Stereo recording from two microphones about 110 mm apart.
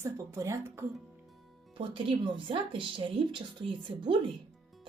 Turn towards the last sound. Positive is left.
turn(degrees=-50)  # may be behind; listen again after turning